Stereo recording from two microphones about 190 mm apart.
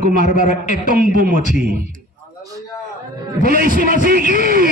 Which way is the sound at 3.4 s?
50° right (ahead or behind).